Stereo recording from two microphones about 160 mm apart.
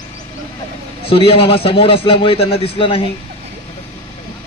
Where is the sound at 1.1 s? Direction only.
35° left (ahead or behind).